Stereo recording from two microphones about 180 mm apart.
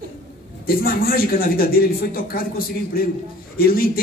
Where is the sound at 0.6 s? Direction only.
55° left (ahead or behind).